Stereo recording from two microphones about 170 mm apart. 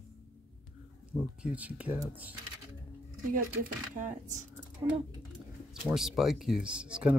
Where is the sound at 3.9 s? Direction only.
45° right (ahead or behind).